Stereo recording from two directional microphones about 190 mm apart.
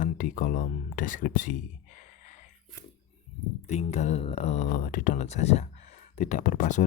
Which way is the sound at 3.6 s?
35° left (ahead or behind).